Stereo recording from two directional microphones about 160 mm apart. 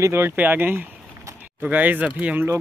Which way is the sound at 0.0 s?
15° right (ahead or behind).